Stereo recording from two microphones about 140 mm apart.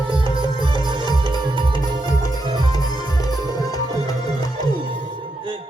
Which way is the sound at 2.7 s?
30° left (ahead or behind).